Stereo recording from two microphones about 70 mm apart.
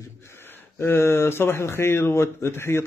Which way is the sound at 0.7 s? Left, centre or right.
Left.